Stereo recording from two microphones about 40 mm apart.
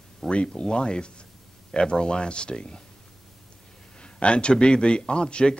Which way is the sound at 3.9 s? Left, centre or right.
Left.